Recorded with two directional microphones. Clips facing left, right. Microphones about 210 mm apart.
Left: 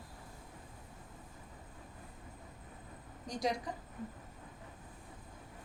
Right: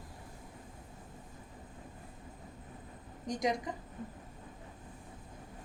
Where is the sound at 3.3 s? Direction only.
20° right (ahead or behind).